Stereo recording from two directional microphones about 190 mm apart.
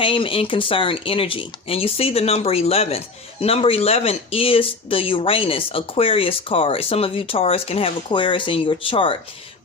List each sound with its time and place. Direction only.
0.0 s speech: 25° left (ahead or behind)